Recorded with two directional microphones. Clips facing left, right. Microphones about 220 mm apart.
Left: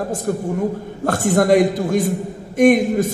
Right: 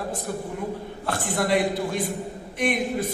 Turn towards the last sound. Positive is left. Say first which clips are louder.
# left 11 dB
turn(degrees=45)  # may be behind; listen again after turning